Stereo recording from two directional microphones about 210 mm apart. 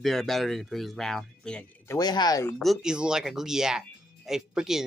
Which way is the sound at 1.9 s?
20° left (ahead or behind).